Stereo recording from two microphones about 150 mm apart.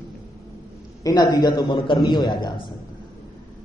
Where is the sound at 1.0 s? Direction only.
25° left (ahead or behind).